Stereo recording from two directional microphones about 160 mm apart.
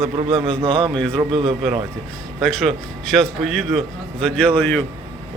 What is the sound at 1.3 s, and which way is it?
Speech, 35° right (ahead or behind).